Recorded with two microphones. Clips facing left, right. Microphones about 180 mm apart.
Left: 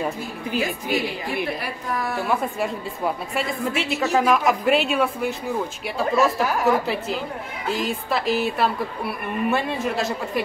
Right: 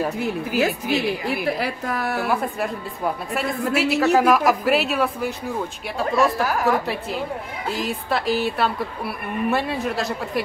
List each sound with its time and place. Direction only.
0.6 s a woman's voice: 75° right (ahead or behind)
2.2 s speech: centre (ahead or behind)